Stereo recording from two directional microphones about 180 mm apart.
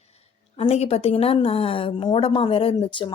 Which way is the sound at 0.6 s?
35° left (ahead or behind).